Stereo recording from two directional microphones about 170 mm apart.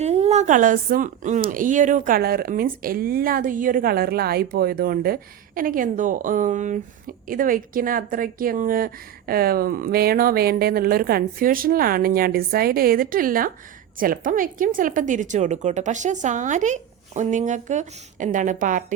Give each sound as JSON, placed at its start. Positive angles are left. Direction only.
{"t": 0.0, "sound": "a woman's voice", "side_deg": -40}